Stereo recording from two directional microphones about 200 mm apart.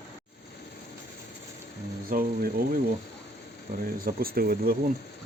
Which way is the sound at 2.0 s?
45° right (ahead or behind).